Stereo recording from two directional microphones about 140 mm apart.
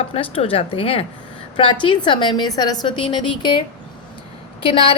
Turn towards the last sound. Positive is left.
turn(degrees=40)  # may be behind; listen again after turning